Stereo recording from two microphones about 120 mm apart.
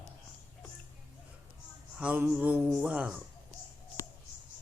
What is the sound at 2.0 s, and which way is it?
Music, 10° right (ahead or behind).